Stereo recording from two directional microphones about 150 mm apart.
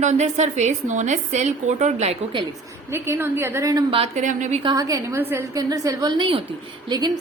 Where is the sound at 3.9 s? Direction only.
45° right (ahead or behind).